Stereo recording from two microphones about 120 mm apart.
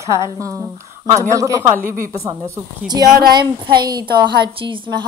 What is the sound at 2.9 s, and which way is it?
A woman's voice, 35° right (ahead or behind).